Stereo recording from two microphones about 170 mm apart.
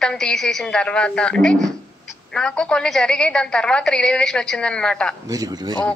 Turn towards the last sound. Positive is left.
turn(degrees=-25)  # may be behind; listen again after turning